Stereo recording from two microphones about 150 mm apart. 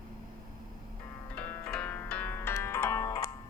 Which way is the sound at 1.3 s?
10° left (ahead or behind).